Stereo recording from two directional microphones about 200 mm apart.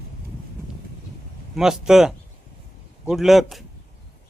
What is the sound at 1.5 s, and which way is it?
A woman's voice, centre (ahead or behind).